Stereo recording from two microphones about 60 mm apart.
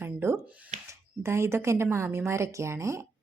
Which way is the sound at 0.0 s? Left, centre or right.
Right.